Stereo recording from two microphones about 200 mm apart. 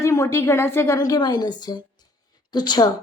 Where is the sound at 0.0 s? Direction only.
15° left (ahead or behind).